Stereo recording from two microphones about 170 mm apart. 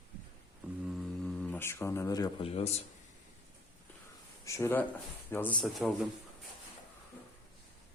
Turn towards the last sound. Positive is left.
turn(degrees=0)  # may be behind; listen again after turning